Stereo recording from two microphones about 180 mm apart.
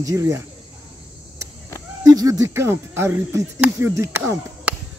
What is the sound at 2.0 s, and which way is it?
Speech, 20° right (ahead or behind).